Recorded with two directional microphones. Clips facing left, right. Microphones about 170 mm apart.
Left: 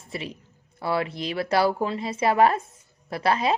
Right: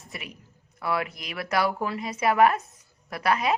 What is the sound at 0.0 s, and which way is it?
A man's voice, 30° left (ahead or behind).